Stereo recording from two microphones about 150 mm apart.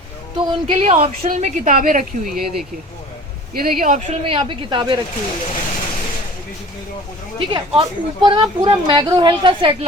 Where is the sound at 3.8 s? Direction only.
60° right (ahead or behind).